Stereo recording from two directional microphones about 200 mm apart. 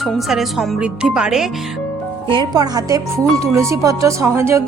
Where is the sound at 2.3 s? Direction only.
20° right (ahead or behind).